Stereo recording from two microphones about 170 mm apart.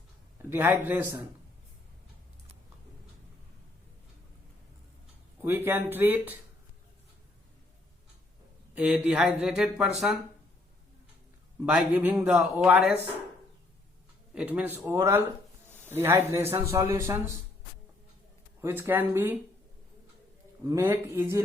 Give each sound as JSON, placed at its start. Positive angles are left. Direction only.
{"t": 0.5, "sound": "speech", "side_deg": -10}
{"t": 5.4, "sound": "speech", "side_deg": -15}
{"t": 8.7, "sound": "speech", "side_deg": -5}
{"t": 11.6, "sound": "speech", "side_deg": -5}
{"t": 14.3, "sound": "speech", "side_deg": -10}
{"t": 18.6, "sound": "speech", "side_deg": -10}
{"t": 20.7, "sound": "speech", "side_deg": -15}